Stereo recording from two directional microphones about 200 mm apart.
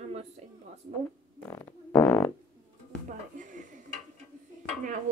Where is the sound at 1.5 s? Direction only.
10° left (ahead or behind).